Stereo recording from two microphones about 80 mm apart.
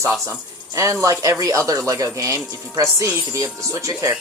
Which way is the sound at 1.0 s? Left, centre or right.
Right.